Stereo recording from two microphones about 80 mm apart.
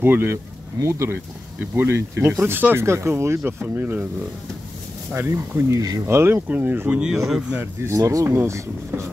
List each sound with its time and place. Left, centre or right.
0.0 s speech: right
5.1 s speech: right
7.0 s speech: centre
7.8 s speech: right